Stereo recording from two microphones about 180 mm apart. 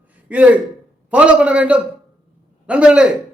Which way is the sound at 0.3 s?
10° right (ahead or behind).